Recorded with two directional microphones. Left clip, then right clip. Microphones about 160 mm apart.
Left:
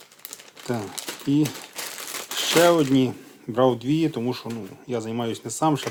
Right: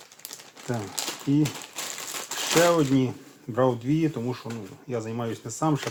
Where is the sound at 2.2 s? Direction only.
25° left (ahead or behind).